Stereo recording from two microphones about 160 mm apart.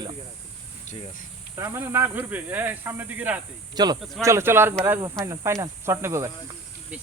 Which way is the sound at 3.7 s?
25° right (ahead or behind).